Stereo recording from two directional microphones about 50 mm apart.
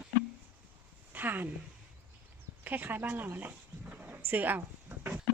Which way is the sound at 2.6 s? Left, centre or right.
Right.